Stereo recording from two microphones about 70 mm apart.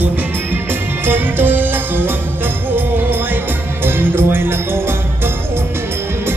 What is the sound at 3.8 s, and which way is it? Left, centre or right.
Music, right.